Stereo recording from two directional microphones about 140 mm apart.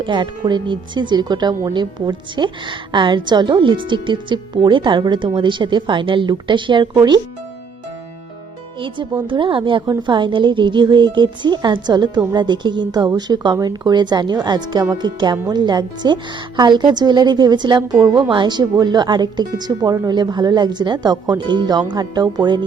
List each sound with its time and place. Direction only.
0.0 s speech: 35° right (ahead or behind)
9.2 s speech: 35° right (ahead or behind)